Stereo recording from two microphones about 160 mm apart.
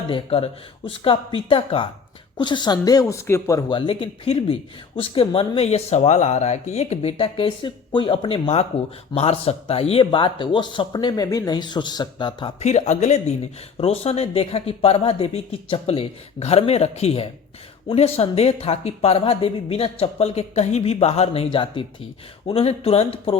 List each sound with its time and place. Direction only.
0.1 s speech: 35° left (ahead or behind); by 3.6 s 15° left (ahead or behind)
3.7 s speech: 30° left (ahead or behind)
12.5 s speech: 45° left (ahead or behind)